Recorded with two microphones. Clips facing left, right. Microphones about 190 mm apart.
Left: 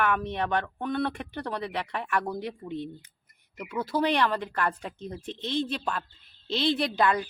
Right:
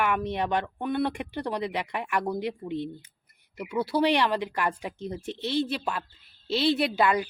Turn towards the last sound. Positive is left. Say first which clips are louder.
# right 1 dB
turn(degrees=-10)  # may be behind; listen again after turning